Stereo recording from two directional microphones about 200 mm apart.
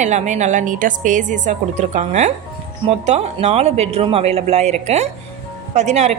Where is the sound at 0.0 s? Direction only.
35° right (ahead or behind).